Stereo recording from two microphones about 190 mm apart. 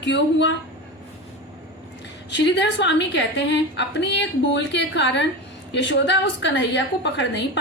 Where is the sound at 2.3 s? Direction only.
70° left (ahead or behind).